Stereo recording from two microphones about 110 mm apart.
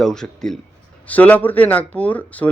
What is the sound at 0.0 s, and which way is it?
A man's voice, 5° left (ahead or behind).